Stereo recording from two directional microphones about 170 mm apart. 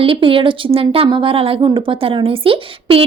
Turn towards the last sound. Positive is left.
turn(degrees=-35)  # may be behind; listen again after turning